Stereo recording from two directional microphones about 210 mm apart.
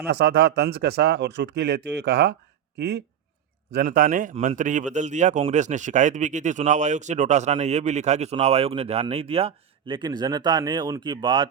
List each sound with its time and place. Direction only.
0.0 s a man's voice: 50° right (ahead or behind); by 11.4 s 20° right (ahead or behind)